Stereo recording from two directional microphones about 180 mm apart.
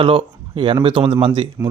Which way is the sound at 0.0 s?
25° right (ahead or behind).